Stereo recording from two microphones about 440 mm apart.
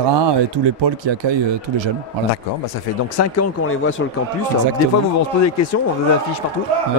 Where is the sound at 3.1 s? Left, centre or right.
Left.